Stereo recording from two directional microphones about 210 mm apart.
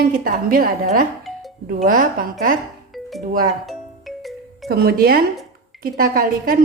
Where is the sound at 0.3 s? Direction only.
45° right (ahead or behind).